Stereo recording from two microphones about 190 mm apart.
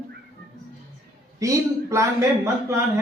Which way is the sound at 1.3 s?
15° right (ahead or behind).